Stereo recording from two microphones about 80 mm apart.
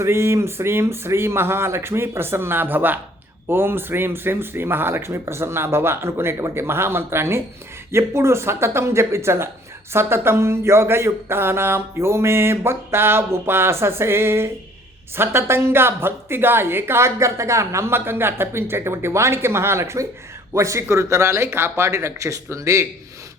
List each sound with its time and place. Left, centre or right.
0.0 s a woman's voice: right